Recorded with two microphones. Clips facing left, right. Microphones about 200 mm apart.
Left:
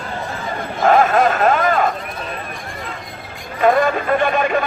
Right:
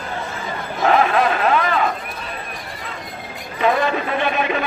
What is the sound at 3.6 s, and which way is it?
A man's voice, 50° left (ahead or behind).